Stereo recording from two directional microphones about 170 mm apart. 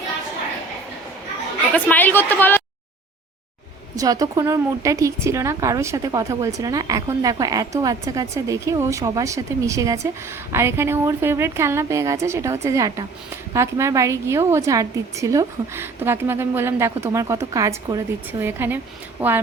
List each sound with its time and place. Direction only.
1.7 s a woman's voice: 10° left (ahead or behind)
3.9 s a woman's voice: 20° right (ahead or behind)